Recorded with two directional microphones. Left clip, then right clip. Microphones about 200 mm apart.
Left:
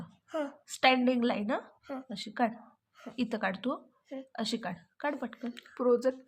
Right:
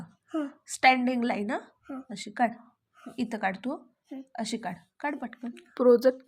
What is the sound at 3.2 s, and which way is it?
A woman's voice, centre (ahead or behind).